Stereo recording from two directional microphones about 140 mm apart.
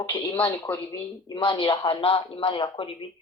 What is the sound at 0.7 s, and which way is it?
Speech, 10° left (ahead or behind).